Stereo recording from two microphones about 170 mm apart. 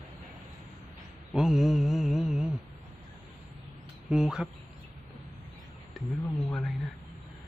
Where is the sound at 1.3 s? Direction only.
Centre (ahead or behind).